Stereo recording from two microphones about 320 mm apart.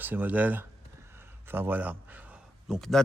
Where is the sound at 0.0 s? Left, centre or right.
Centre.